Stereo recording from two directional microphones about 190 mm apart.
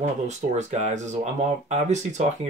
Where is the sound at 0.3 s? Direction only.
35° right (ahead or behind).